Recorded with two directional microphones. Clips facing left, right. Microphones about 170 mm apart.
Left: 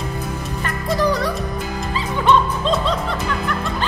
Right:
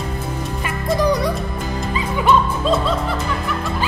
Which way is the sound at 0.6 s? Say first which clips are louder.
Right 1 dB; 15° right (ahead or behind).